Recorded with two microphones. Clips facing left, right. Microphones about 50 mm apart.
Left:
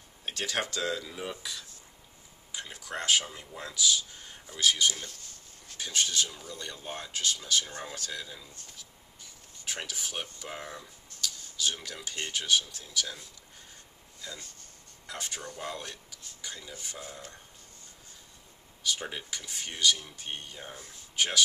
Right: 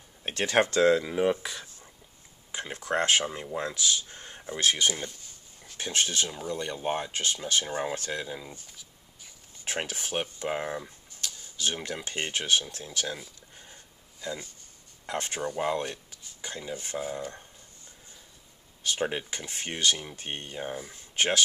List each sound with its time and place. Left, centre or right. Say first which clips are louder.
0.2 s speech: right 8 dB; right
4.9 s speech: right 5 dB; right
9.7 s speech: right 5 dB; right
10.4 s a sound: right 9 dB; right
11.5 s speech: right 4 dB; right
14.2 s speech: right 8 dB; centre
15.1 s speech: right 7 dB; right
15.4 s speech: right 13 dB; right
16.3 s dishes: right 7 dB; right
18.9 s speech: right 5 dB; right